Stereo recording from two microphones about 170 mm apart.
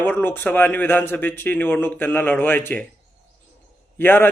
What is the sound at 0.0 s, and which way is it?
A man's voice, 10° left (ahead or behind).